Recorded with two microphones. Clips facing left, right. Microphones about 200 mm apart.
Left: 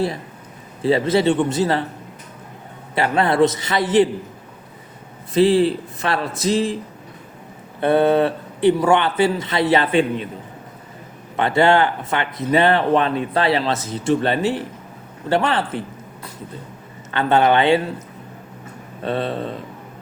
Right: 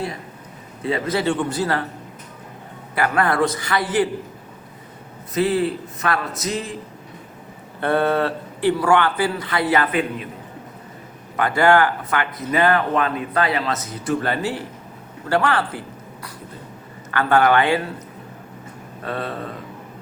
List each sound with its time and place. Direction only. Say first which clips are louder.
0.8 s speech: left 5 dB; 30° left (ahead or behind)
2.9 s speech: left 2 dB; 25° left (ahead or behind)
5.3 s speech: left 5 dB; 30° left (ahead or behind)
7.8 s speech: left 4 dB; 20° left (ahead or behind)
11.3 s speech: left 1 dB; 25° left (ahead or behind)
17.1 s speech: left 1 dB; 25° left (ahead or behind)
19.0 s speech: left 5 dB; 25° left (ahead or behind)